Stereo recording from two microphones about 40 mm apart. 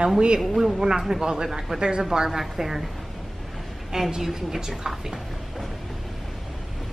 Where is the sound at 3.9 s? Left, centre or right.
Centre.